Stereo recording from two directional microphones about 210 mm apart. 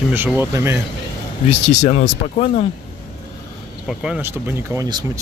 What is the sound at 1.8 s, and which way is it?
Speech, 35° left (ahead or behind).